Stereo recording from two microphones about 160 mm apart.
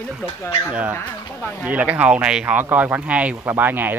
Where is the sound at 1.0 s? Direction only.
10° left (ahead or behind).